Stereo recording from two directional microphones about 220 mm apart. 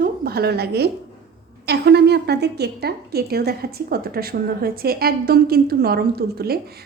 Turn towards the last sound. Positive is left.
turn(degrees=-45)  # may be behind; listen again after turning